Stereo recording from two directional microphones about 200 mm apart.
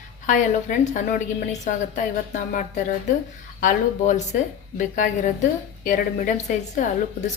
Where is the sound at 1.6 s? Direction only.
40° left (ahead or behind).